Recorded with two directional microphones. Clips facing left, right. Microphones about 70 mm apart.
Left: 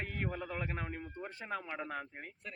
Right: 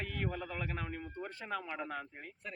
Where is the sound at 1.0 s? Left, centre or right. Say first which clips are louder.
Right 1 dB; centre.